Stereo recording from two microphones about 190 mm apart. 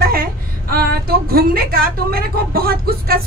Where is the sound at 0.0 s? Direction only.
50° right (ahead or behind).